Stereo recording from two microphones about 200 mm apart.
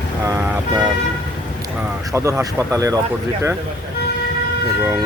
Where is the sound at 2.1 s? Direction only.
15° right (ahead or behind).